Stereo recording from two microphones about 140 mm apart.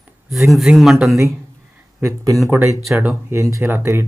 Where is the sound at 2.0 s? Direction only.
25° right (ahead or behind).